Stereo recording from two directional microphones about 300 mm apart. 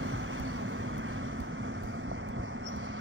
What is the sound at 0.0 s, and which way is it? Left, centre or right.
Vehicle, right.